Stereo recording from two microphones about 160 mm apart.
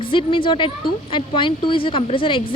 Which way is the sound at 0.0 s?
30° left (ahead or behind).